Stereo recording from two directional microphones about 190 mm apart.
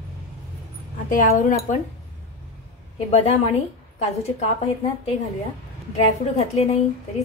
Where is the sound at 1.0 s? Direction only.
45° left (ahead or behind).